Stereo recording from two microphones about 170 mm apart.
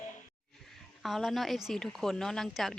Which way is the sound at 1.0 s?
Centre (ahead or behind).